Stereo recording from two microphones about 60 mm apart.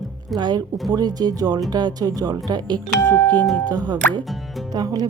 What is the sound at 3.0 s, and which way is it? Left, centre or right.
Speech, left.